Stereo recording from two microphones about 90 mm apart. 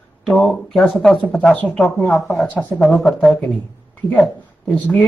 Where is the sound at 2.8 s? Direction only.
5° left (ahead or behind).